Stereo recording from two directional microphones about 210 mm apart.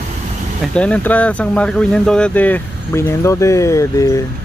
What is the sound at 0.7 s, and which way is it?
Speech, 5° left (ahead or behind).